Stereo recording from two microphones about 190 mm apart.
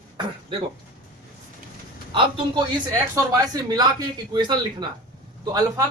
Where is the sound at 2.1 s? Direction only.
25° right (ahead or behind).